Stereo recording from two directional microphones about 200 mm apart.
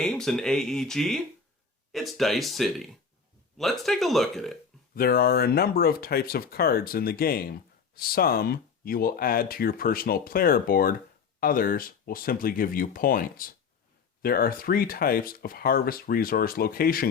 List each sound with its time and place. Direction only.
0.0 s speech: 5° left (ahead or behind)
4.9 s speech: 50° left (ahead or behind)